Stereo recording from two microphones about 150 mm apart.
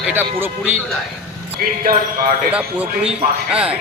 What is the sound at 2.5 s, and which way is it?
A man's voice, 10° right (ahead or behind).